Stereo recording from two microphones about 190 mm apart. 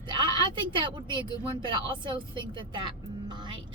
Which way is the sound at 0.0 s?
25° right (ahead or behind).